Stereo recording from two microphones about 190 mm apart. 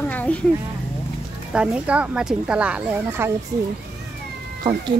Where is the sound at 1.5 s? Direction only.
5° right (ahead or behind).